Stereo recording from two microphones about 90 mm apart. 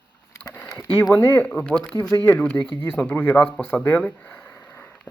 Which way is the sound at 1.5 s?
15° left (ahead or behind).